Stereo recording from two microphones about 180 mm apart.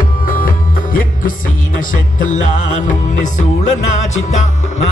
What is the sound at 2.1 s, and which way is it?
Music, 45° left (ahead or behind).